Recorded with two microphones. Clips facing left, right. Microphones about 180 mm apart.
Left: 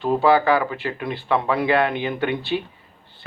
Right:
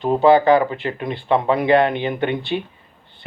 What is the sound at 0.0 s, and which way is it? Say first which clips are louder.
Speech: right 4 dB; 20° right (ahead or behind).